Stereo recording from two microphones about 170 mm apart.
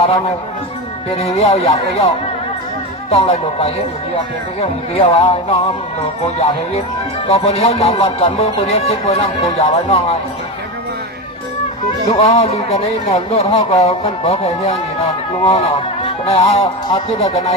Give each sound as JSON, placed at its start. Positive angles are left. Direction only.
{"t": 1.1, "sound": "speech", "side_deg": 35}
{"t": 7.3, "sound": "speech", "side_deg": 35}
{"t": 12.1, "sound": "speech", "side_deg": 35}